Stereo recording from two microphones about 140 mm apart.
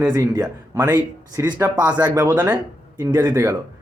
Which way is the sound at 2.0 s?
15° right (ahead or behind).